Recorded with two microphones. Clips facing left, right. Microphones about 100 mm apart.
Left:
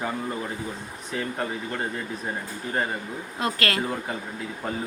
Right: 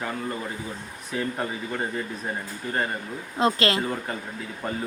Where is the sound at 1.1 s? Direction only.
Centre (ahead or behind).